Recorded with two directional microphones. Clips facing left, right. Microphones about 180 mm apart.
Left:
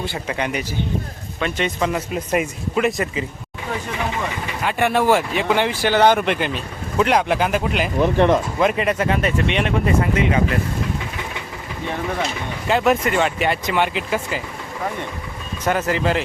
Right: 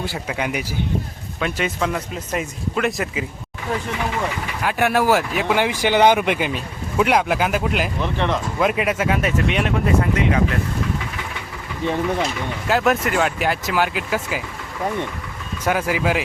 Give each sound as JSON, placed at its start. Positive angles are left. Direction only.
{"t": 0.0, "sound": "speech", "side_deg": -5}
{"t": 2.1, "sound": "speech", "side_deg": 10}
{"t": 4.6, "sound": "speech", "side_deg": -5}
{"t": 7.9, "sound": "speech", "side_deg": 45}
{"t": 8.5, "sound": "speech", "side_deg": -5}
{"t": 12.6, "sound": "speech", "side_deg": 0}
{"t": 15.6, "sound": "speech", "side_deg": -10}